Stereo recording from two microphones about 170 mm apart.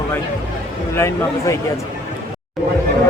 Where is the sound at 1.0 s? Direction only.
15° left (ahead or behind).